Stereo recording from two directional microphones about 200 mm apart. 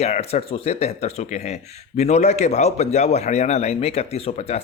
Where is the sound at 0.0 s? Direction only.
30° left (ahead or behind).